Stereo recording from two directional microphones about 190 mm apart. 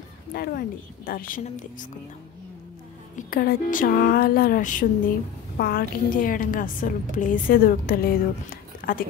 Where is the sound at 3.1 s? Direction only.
50° left (ahead or behind).